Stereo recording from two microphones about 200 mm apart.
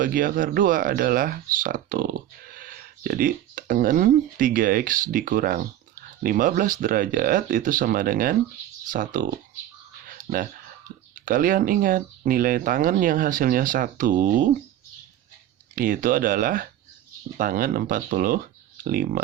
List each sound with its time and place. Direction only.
0.0 s speech: 45° right (ahead or behind)
10.1 s a sound: 45° right (ahead or behind)
11.1 s speech: 45° right (ahead or behind)
15.7 s speech: 45° right (ahead or behind)